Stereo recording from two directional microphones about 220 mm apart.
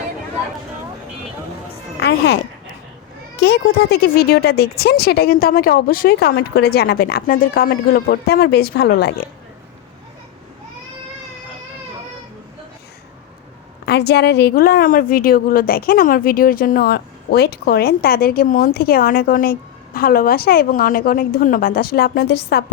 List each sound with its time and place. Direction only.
2.0 s a child's voice: 50° left (ahead or behind)
13.8 s a woman's voice: 45° left (ahead or behind)